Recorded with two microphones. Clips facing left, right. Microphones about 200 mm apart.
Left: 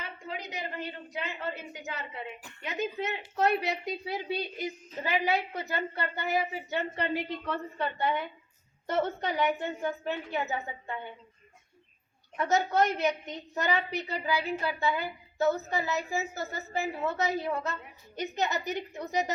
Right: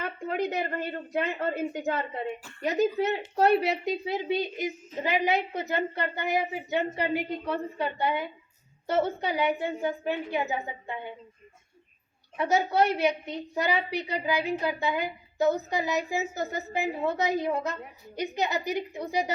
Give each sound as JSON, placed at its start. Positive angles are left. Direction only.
{"t": 0.0, "sound": "a woman's voice", "side_deg": -55}
{"t": 2.6, "sound": "a woman's voice", "side_deg": -35}
{"t": 12.4, "sound": "a woman's voice", "side_deg": -10}